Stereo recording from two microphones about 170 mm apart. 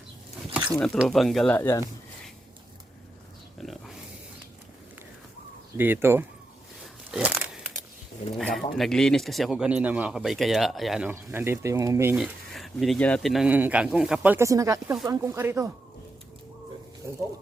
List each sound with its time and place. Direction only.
0.8 s speech: centre (ahead or behind)
1.5 s speech: 15° left (ahead or behind)
3.6 s pig: centre (ahead or behind)
5.7 s speech: 10° right (ahead or behind)
7.1 s crumpling: 10° right (ahead or behind)
8.4 s speech: centre (ahead or behind)
11.1 s speech: 15° right (ahead or behind)
12.1 s speech: centre (ahead or behind)